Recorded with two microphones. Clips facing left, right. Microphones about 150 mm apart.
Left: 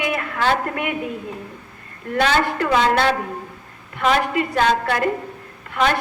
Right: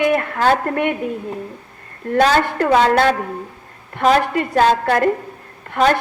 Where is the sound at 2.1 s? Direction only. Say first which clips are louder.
Right 4 dB; 40° right (ahead or behind).